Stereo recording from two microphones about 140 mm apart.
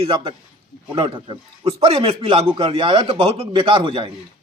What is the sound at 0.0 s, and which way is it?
Speech, 35° right (ahead or behind).